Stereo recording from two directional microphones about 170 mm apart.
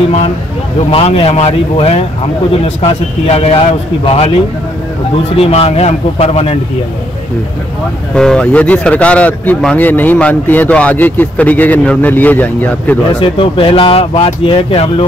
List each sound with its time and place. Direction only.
0.7 s speech: 35° left (ahead or behind)
3.3 s speech: 35° left (ahead or behind)
8.1 s speech: 5° left (ahead or behind)
13.2 s speech: 30° left (ahead or behind)